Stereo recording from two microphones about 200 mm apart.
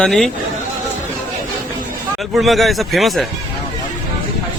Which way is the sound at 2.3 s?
Centre (ahead or behind).